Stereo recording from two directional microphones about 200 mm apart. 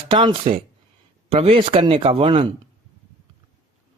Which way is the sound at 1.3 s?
30° right (ahead or behind).